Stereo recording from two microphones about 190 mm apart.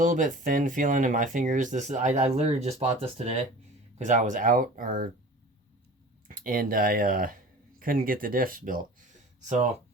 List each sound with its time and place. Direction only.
0.0 s speech: 45° right (ahead or behind)
6.2 s speech: 45° right (ahead or behind)